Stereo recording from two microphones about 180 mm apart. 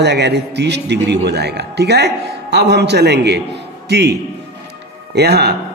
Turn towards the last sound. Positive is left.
turn(degrees=-65)  # may be behind; listen again after turning